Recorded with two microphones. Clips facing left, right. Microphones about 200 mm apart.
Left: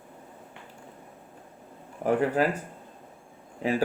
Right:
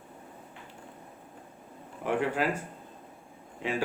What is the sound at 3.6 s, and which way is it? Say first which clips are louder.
Speech: left 5 dB; 40° left (ahead or behind).